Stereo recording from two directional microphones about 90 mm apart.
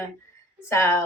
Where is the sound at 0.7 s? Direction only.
30° left (ahead or behind).